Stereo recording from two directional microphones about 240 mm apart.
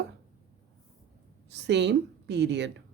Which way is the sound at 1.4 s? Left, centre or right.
Right.